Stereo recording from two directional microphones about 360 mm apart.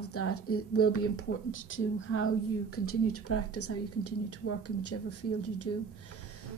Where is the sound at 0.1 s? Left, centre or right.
Left.